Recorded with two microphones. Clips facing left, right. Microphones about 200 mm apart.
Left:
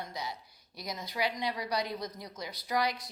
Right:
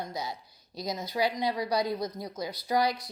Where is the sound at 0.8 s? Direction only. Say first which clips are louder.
Right 6 dB; 20° right (ahead or behind).